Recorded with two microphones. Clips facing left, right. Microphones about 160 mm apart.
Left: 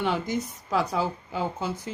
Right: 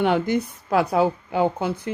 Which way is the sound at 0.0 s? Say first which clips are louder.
Right 7 dB; 60° right (ahead or behind).